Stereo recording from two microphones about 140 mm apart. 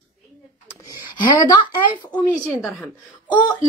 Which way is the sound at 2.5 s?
5° right (ahead or behind).